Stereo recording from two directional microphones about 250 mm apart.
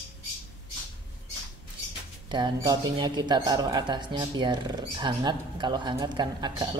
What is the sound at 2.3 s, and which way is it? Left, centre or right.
Speech, centre.